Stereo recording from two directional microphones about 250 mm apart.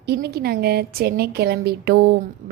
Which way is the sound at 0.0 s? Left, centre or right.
Right.